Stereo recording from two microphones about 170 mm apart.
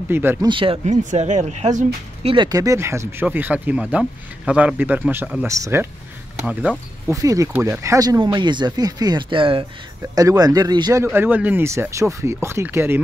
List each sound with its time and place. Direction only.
0.1 s speech: 15° right (ahead or behind)
0.5 s speech: 30° right (ahead or behind)
2.2 s speech: 25° right (ahead or behind)
7.1 s speech: 20° right (ahead or behind)
11.1 s speech: 10° right (ahead or behind)